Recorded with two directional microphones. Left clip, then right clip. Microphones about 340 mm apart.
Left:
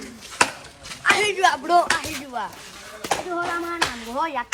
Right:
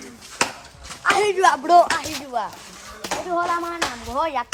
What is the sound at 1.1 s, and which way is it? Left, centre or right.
Speech, right.